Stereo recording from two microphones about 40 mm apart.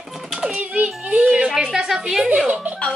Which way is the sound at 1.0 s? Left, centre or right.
Right.